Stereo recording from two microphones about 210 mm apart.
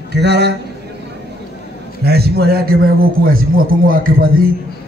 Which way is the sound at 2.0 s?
50° right (ahead or behind).